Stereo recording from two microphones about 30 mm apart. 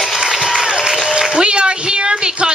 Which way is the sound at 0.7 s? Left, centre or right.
Centre.